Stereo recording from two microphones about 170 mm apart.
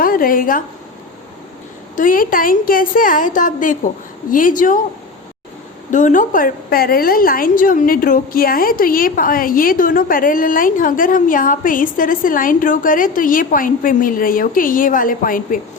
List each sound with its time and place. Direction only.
0.0 s a woman's voice: 55° left (ahead or behind)
2.0 s a woman's voice: 55° left (ahead or behind)
5.9 s a woman's voice: 50° left (ahead or behind)